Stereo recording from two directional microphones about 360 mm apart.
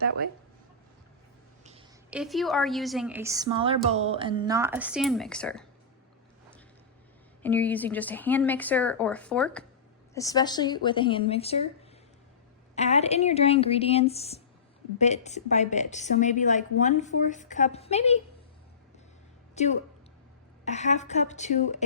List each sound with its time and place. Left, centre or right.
2.0 s speech: centre
7.4 s speech: centre
12.7 s a woman's voice: centre
19.5 s a woman's voice: centre